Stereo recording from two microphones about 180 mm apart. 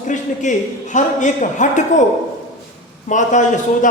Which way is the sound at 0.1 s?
45° left (ahead or behind).